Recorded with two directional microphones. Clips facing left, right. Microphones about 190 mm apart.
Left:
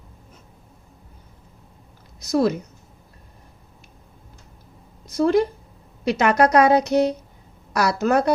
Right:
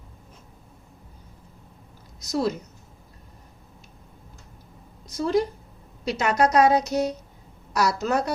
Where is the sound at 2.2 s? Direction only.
60° left (ahead or behind).